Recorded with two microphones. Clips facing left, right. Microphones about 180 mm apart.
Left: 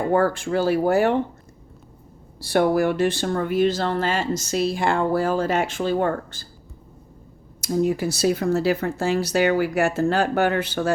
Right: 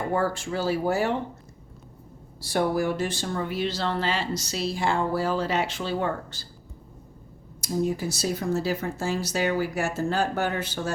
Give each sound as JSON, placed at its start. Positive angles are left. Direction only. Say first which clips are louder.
{"t": 0.1, "sound": "speech", "louder": "left 7 dB", "side_deg": 55}
{"t": 2.4, "sound": "speech", "louder": "left 6 dB", "side_deg": 65}
{"t": 7.6, "sound": "speech", "louder": "left 5 dB", "side_deg": 65}